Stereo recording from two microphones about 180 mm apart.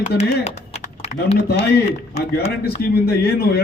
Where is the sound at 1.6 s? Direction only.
65° left (ahead or behind).